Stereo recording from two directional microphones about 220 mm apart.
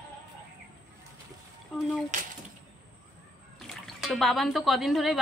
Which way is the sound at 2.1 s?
35° right (ahead or behind).